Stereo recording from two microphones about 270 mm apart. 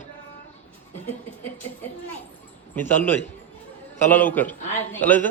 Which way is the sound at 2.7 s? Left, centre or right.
Centre.